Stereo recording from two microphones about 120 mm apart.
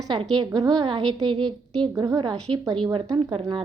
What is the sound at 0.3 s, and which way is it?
A woman's voice, 35° right (ahead or behind).